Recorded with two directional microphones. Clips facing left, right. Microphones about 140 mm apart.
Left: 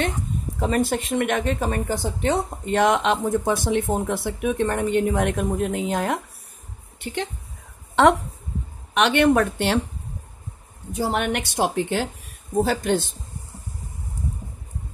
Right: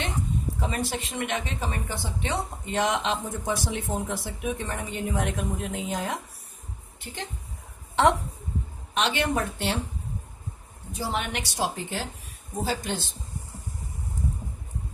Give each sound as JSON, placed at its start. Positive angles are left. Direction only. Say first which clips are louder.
{"t": 0.6, "sound": "speech", "louder": "left 12 dB", "side_deg": 50}
{"t": 7.0, "sound": "a woman's voice", "louder": "left 9 dB", "side_deg": 75}
{"t": 7.9, "sound": "a sound", "louder": "left 5 dB", "side_deg": 70}
{"t": 8.9, "sound": "speech", "louder": "left 8 dB", "side_deg": 65}
{"t": 10.9, "sound": "speech", "louder": "left 7 dB", "side_deg": 55}
{"t": 12.6, "sound": "speech", "louder": "left 4 dB", "side_deg": 55}